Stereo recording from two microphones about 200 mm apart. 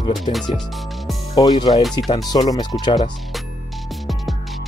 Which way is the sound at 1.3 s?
20° left (ahead or behind).